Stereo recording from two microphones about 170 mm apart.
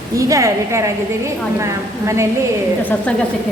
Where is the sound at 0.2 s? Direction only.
20° right (ahead or behind).